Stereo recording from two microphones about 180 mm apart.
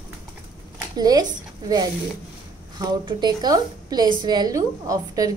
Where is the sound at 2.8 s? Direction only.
25° right (ahead or behind).